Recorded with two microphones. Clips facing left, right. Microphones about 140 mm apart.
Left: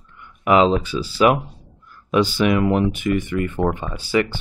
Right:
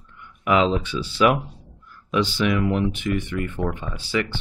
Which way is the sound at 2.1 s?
45° left (ahead or behind).